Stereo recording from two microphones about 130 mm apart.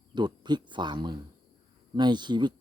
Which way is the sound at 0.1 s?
35° right (ahead or behind).